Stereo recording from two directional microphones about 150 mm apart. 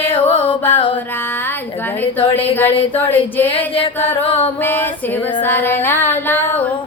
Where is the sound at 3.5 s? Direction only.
40° left (ahead or behind).